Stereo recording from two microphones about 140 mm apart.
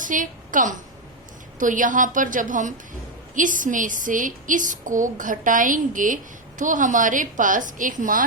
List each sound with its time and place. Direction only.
0.0 s a woman's voice: 70° right (ahead or behind)